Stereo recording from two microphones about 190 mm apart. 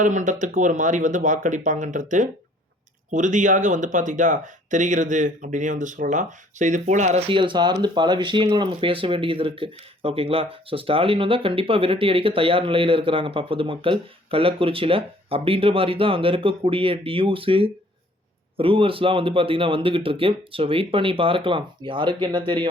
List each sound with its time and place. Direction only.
0.0 s speech: 40° right (ahead or behind); by 22.7 s 25° right (ahead or behind)